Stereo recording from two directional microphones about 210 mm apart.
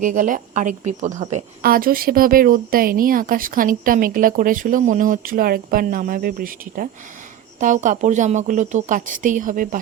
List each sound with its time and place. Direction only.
0.0 s a woman's voice: 35° right (ahead or behind)